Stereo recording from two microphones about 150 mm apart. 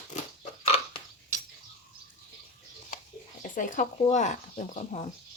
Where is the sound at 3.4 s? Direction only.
60° left (ahead or behind).